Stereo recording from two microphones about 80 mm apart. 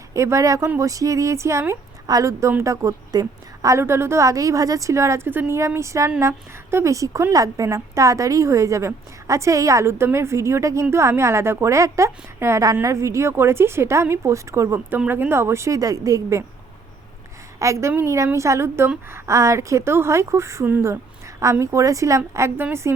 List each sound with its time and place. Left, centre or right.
0.1 s a woman's voice: right
14.8 s a woman's voice: right
17.6 s a woman's voice: right